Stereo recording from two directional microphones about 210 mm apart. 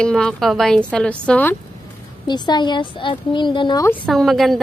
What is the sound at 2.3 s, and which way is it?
Speech, 20° left (ahead or behind).